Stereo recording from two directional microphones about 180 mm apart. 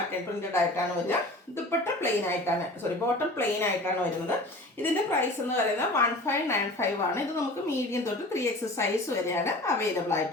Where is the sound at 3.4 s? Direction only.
15° left (ahead or behind).